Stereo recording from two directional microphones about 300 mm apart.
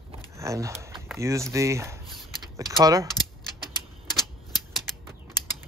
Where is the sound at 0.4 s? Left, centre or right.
Centre.